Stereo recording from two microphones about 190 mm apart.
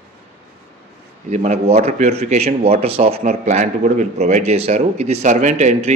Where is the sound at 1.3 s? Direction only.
35° right (ahead or behind).